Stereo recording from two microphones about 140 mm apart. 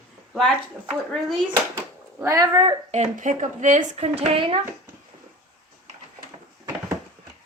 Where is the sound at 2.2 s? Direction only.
25° right (ahead or behind).